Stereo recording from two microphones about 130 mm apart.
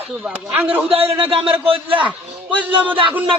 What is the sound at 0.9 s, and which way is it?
A man's voice, 45° right (ahead or behind).